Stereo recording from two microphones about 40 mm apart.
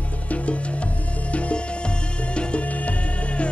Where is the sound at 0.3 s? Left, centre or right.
Left.